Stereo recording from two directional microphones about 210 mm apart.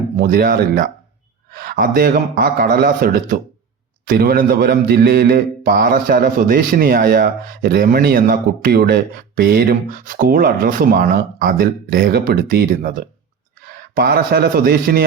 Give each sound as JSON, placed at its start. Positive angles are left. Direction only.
{"t": 0.2, "sound": "speech", "side_deg": -45}